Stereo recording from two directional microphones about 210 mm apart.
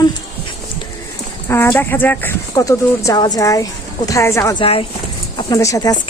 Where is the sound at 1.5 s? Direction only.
10° left (ahead or behind).